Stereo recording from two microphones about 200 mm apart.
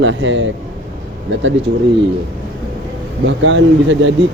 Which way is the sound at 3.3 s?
65° right (ahead or behind).